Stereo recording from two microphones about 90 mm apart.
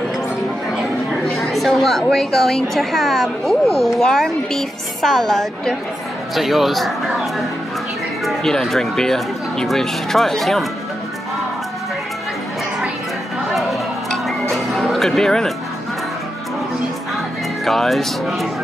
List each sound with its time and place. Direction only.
1.2 s a woman's voice: 5° left (ahead or behind)
13.5 s tick-tock: centre (ahead or behind)
14.5 s music: centre (ahead or behind)
17.6 s a woman's voice: centre (ahead or behind)